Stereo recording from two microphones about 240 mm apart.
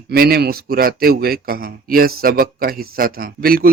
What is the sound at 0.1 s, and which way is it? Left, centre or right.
A man's voice, right.